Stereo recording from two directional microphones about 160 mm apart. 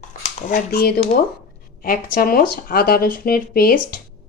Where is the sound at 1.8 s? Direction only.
65° left (ahead or behind).